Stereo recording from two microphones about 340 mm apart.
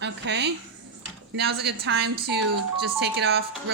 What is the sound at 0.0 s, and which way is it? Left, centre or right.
Speech, right.